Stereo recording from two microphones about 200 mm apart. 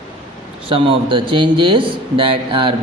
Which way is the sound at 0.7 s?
25° right (ahead or behind).